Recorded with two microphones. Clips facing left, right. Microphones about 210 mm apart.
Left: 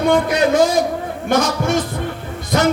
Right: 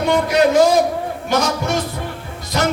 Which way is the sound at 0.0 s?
55° left (ahead or behind).